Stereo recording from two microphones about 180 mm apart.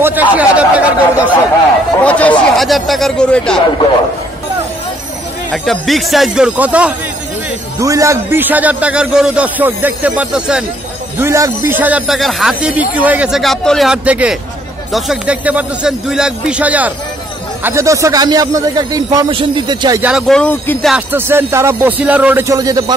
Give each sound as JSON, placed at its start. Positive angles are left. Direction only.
{"t": 0.0, "sound": "speech", "side_deg": -10}
{"t": 2.0, "sound": "speech", "side_deg": 5}
{"t": 5.5, "sound": "speech", "side_deg": 0}
{"t": 20.0, "sound": "speech", "side_deg": -5}
{"t": 20.9, "sound": "speech", "side_deg": -10}